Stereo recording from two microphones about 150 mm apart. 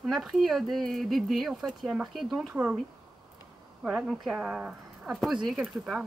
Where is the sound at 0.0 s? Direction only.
Centre (ahead or behind).